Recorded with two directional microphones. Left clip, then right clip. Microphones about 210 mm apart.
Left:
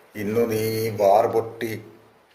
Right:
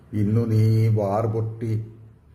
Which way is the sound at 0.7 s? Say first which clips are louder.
Left 6 dB; 35° left (ahead or behind).